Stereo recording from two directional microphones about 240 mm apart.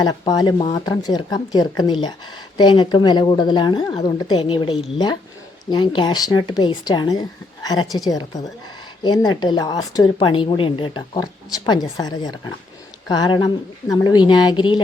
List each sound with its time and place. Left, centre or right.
0.0 s a woman's voice: centre